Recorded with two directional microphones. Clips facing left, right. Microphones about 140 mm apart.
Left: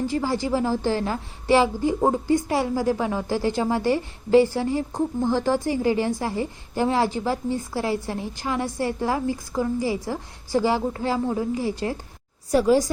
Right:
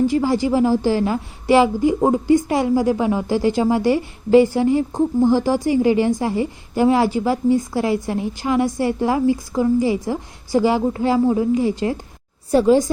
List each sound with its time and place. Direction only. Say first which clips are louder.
0.1 s a woman's voice: right 6 dB; 15° right (ahead or behind)